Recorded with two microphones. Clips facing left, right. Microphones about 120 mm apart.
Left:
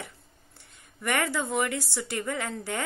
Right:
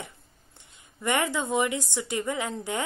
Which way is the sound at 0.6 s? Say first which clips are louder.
Right 1 dB; 20° right (ahead or behind).